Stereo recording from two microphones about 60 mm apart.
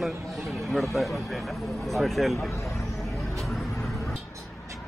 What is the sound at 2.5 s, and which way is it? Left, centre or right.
Speech, left.